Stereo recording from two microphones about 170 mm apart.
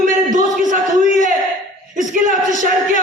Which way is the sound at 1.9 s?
50° right (ahead or behind).